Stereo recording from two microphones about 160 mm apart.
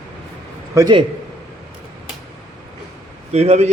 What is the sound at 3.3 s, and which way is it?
Speech, 45° right (ahead or behind).